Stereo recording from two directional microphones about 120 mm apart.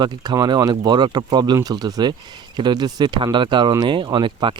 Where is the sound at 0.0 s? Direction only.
35° right (ahead or behind).